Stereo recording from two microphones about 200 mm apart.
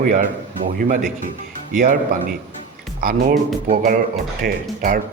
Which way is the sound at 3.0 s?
45° right (ahead or behind).